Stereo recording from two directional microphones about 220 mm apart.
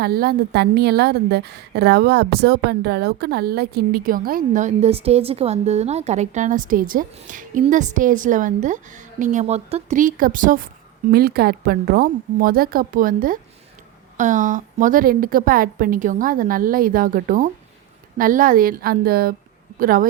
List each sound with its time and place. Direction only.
0.0 s a woman's voice: 45° right (ahead or behind)